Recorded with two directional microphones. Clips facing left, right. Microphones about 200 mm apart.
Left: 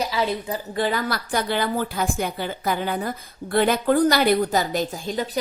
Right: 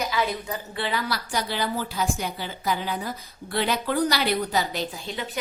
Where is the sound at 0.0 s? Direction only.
30° left (ahead or behind).